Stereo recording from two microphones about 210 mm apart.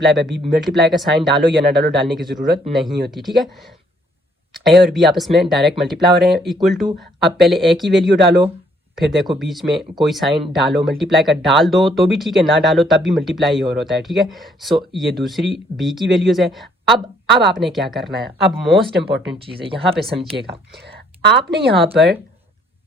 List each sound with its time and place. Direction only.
0.0 s speech: centre (ahead or behind)
4.5 s speech: centre (ahead or behind)
17.2 s a woman's voice: 55° right (ahead or behind)
17.5 s speech: centre (ahead or behind)
19.9 s speech: centre (ahead or behind)
20.4 s speech: 50° right (ahead or behind)
21.7 s speech: 25° right (ahead or behind)